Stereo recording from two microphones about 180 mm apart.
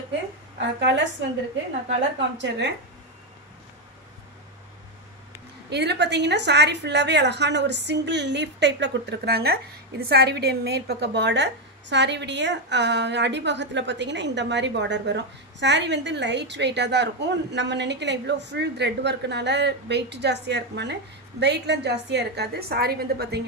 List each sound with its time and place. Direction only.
0.6 s a woman's voice: 80° right
2.1 s a woman's voice: 80° right
5.7 s a woman's voice: 70° right (ahead or behind)